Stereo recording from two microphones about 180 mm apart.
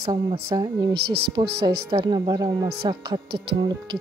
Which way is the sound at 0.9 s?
65° right (ahead or behind).